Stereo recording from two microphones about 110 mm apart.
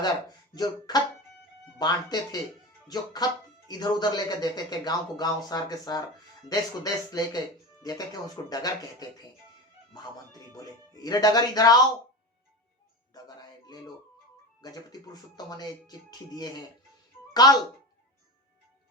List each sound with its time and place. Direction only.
0.0 s speech: 40° left (ahead or behind)
13.1 s a sound: 35° left (ahead or behind)
14.6 s speech: 35° left (ahead or behind)